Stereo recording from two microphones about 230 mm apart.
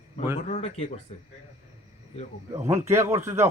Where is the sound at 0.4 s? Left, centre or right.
Left.